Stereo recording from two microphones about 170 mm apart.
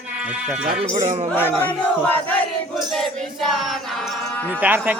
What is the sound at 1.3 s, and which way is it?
Battle cry, 10° left (ahead or behind).